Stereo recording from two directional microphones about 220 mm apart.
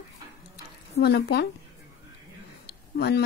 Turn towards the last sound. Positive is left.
turn(degrees=45)  # may be behind; listen again after turning